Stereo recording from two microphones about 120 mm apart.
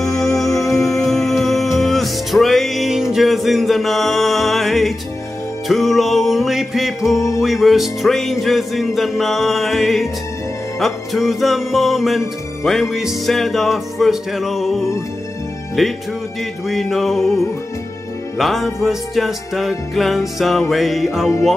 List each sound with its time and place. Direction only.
0.0 s music: 5° left (ahead or behind)
0.5 s music: 25° left (ahead or behind)
0.9 s music: 5° left (ahead or behind)
7.2 s music: 25° left (ahead or behind)
7.4 s music: centre (ahead or behind)